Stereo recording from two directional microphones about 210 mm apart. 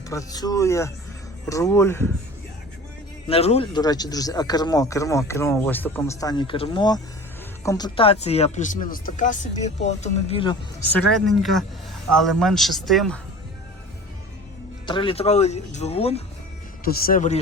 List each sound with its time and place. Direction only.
0.1 s speech: 15° left (ahead or behind)
3.2 s speech: 30° left (ahead or behind)
7.9 s speech: 30° left (ahead or behind)
10.8 s a man's voice: 5° left (ahead or behind)
14.8 s speech: 25° left (ahead or behind)
16.8 s speech: 45° left (ahead or behind)